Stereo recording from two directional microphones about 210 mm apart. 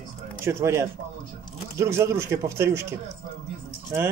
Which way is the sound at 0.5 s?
15° right (ahead or behind).